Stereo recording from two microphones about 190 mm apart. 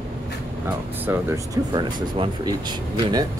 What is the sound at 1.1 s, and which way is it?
Speech, 15° right (ahead or behind).